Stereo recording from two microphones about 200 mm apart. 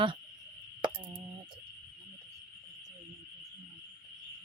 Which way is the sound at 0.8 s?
20° right (ahead or behind).